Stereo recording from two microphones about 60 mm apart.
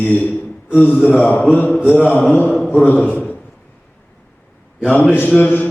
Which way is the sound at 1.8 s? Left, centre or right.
Centre.